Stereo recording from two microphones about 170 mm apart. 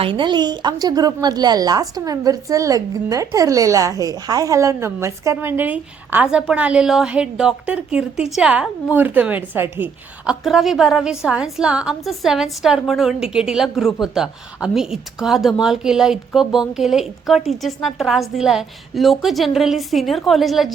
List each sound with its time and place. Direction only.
0.0 s a woman's voice: 30° right (ahead or behind); by 10.3 s 10° right (ahead or behind)
10.4 s a woman's voice: centre (ahead or behind)